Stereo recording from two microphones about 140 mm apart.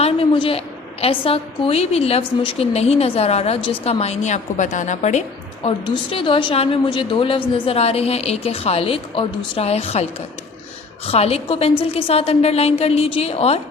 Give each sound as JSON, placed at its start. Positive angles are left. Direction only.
{"t": 0.0, "sound": "a sound", "side_deg": 40}
{"t": 1.0, "sound": "a woman's voice", "side_deg": 40}
{"t": 5.6, "sound": "a woman's voice", "side_deg": 35}